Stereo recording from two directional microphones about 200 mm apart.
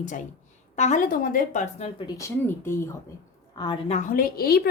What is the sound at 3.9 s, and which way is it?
Speech, 40° left (ahead or behind).